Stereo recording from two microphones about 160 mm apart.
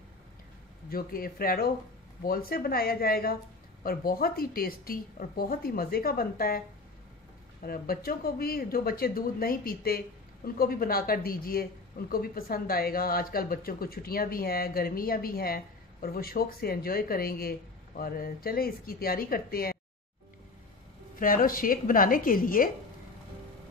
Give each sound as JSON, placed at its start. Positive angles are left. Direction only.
{"t": 0.8, "sound": "speech", "side_deg": 65}
{"t": 7.6, "sound": "speech", "side_deg": 65}
{"t": 21.2, "sound": "a woman's voice", "side_deg": 60}